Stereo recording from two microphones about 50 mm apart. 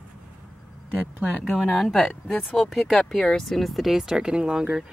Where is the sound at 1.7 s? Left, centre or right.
Centre.